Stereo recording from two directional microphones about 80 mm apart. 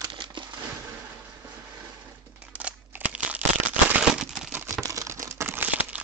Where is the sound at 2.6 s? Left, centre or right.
Centre.